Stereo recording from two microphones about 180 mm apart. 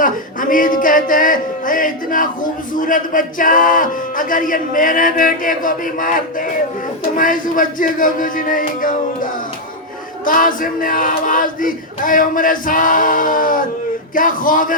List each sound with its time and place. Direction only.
0.0 s music: 50° left (ahead or behind)